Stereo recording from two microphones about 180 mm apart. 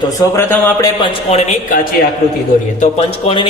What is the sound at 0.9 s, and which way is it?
Speech, 25° left (ahead or behind).